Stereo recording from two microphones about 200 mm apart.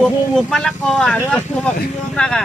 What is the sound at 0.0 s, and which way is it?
Speech, 5° left (ahead or behind).